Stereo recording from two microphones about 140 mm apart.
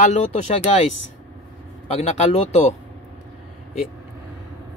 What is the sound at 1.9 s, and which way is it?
Speech, 55° left (ahead or behind).